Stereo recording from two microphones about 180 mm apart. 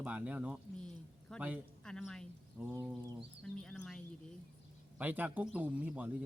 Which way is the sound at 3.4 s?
5° left (ahead or behind).